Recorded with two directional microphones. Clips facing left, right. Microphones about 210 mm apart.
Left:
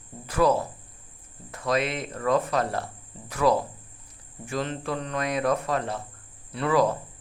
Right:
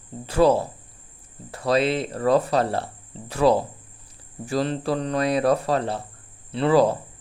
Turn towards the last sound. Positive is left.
turn(degrees=-30)  # may be behind; listen again after turning